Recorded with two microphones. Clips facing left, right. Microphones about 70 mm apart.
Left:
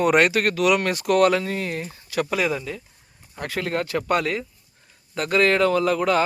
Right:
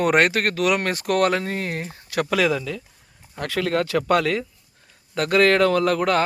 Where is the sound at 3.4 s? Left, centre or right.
Right.